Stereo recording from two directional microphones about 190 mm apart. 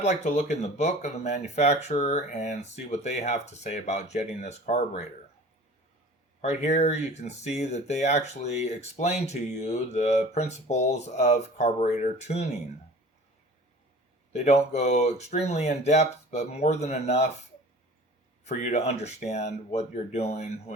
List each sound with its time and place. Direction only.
0.0 s speech: 40° left (ahead or behind)
6.4 s speech: 35° left (ahead or behind)
14.3 s speech: 35° left (ahead or behind)
18.4 s speech: 35° left (ahead or behind)